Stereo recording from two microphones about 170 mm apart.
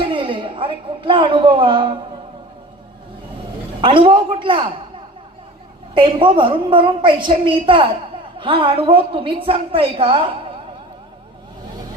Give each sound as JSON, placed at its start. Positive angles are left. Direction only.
{"t": 0.0, "sound": "speech", "side_deg": -30}
{"t": 3.8, "sound": "a woman's voice", "side_deg": -30}
{"t": 5.9, "sound": "a woman's voice", "side_deg": -30}